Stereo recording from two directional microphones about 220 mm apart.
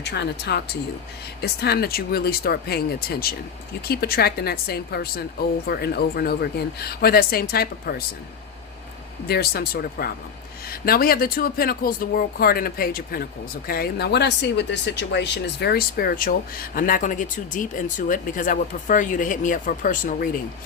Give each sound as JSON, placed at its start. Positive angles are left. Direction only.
{"t": 0.0, "sound": "a woman's voice", "side_deg": 50}
{"t": 9.2, "sound": "a woman's voice", "side_deg": 45}